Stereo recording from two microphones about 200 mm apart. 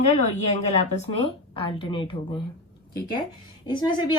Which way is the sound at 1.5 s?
25° left (ahead or behind).